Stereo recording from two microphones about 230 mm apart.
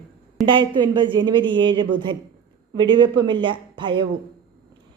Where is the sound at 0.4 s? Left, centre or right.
Centre.